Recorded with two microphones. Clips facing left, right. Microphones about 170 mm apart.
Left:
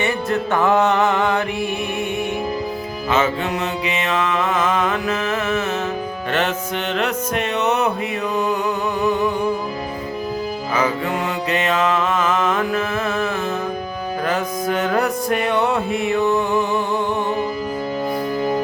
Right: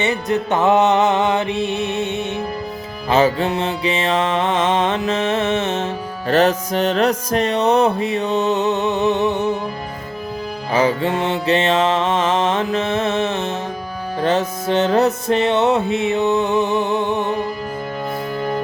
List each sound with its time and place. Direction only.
0.0 s music: 20° right (ahead or behind)
3.1 s music: 35° right (ahead or behind)
6.3 s music: 35° right (ahead or behind)
10.7 s music: 30° right (ahead or behind)